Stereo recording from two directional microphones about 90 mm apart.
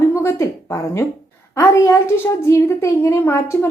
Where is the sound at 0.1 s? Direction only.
30° left (ahead or behind).